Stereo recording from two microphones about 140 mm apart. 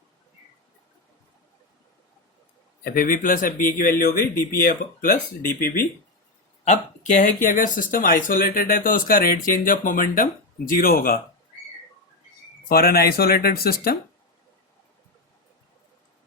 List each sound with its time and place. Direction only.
2.8 s speech: 85° left
3.8 s speech: 90° left
4.6 s speech: 70° left (ahead or behind); by 5.8 s 85° left
6.7 s speech: 60° left (ahead or behind); by 11.2 s 90° left
12.6 s speech: 90° left